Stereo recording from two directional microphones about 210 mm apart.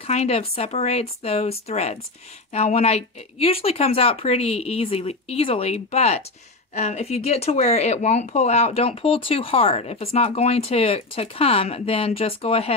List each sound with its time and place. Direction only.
0.0 s speech: 30° left (ahead or behind)